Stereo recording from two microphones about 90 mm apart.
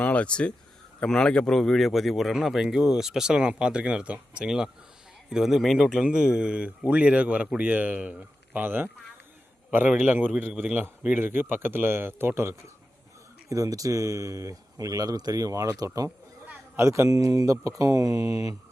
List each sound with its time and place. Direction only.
0.0 s a man's voice: 15° left (ahead or behind); by 8.9 s 20° right (ahead or behind)
9.9 s a man's voice: 15° right (ahead or behind)
13.5 s speech: 40° right (ahead or behind)
16.7 s speech: 30° right (ahead or behind)